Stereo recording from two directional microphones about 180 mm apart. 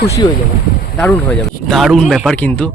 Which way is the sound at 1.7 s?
Centre (ahead or behind).